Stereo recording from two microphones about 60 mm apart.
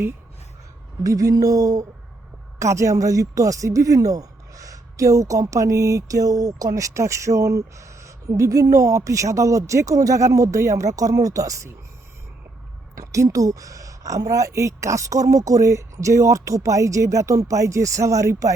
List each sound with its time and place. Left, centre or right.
1.0 s a sound: right
2.6 s a woman's voice: right
13.0 s a woman's voice: right